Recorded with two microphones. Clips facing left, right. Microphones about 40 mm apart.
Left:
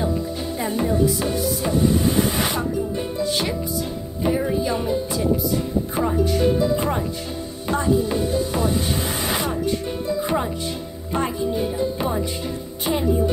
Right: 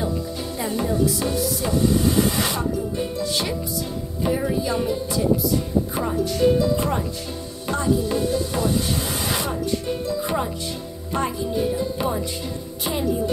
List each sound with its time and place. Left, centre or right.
0.6 s music: left
10.0 s music: centre